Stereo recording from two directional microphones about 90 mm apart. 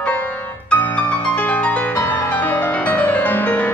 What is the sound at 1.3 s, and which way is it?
Music, 15° left (ahead or behind).